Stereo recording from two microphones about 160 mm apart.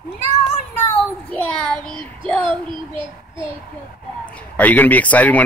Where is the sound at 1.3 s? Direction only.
10° left (ahead or behind).